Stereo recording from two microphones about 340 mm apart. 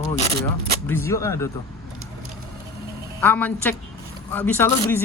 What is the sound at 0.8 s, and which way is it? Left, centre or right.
Speech, centre.